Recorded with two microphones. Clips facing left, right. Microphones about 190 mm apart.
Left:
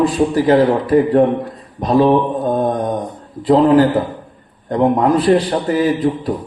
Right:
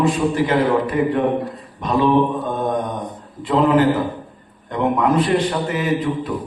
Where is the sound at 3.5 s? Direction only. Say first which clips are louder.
Left 5 dB; 35° left (ahead or behind).